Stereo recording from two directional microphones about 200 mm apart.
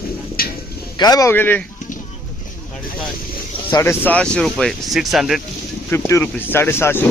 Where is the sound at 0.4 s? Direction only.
50° left (ahead or behind).